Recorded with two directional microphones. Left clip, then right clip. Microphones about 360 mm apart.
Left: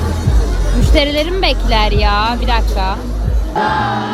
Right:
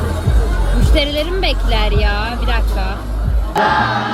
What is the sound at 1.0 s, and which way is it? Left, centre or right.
Speech, centre.